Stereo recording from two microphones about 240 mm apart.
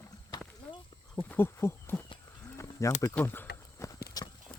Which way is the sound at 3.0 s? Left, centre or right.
Centre.